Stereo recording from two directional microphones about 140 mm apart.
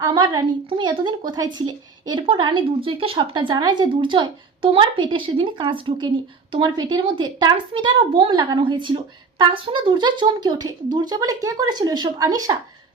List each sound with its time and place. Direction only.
0.1 s speech: 35° right (ahead or behind)